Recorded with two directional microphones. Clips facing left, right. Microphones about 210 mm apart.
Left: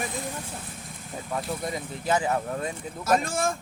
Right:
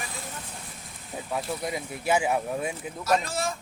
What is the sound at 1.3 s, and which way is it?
Speech, centre (ahead or behind).